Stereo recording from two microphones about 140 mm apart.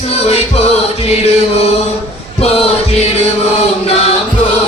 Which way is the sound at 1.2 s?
50° left (ahead or behind).